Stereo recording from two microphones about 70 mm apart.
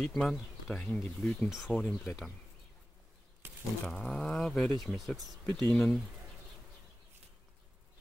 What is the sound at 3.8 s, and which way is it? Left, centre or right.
Speech, centre.